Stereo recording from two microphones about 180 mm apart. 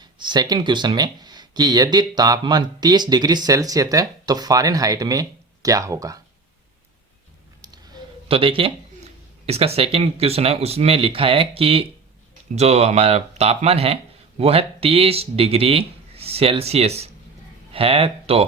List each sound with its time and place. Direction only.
0.0 s speech: 25° right (ahead or behind)
8.3 s speech: 30° right (ahead or behind)